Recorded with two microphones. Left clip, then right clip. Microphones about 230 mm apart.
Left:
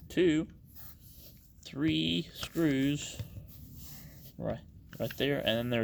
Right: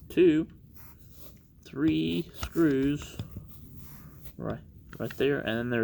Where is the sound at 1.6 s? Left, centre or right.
Left.